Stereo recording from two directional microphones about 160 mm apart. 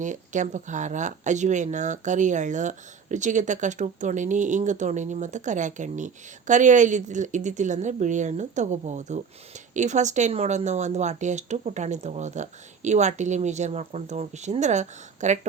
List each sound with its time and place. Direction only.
0.0 s speech: 50° right (ahead or behind)